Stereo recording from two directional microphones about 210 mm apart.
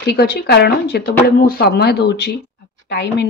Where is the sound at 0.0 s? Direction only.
50° left (ahead or behind).